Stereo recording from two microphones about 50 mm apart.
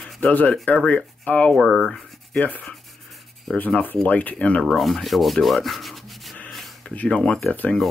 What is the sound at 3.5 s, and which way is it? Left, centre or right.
Speech, centre.